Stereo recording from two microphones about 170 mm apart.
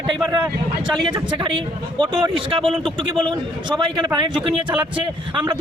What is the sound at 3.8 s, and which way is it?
Speech, 30° right (ahead or behind).